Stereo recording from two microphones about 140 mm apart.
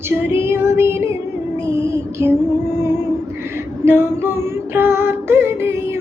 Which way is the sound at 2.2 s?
15° right (ahead or behind).